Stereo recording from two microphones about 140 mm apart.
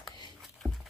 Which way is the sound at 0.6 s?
15° right (ahead or behind).